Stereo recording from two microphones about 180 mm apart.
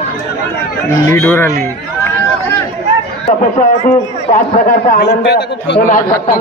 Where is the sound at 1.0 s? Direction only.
15° left (ahead or behind).